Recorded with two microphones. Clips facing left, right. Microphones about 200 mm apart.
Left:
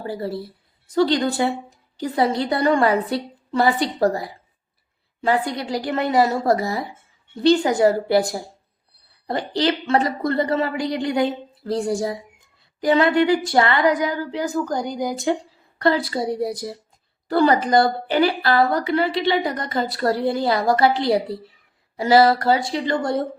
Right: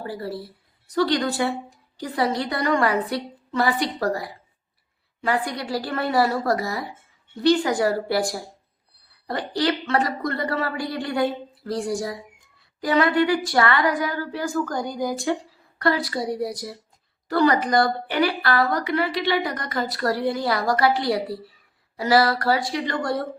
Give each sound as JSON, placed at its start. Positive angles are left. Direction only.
{"t": 0.0, "sound": "a woman's voice", "side_deg": 25}